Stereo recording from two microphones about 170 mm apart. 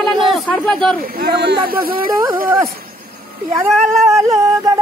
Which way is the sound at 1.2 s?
70° right (ahead or behind).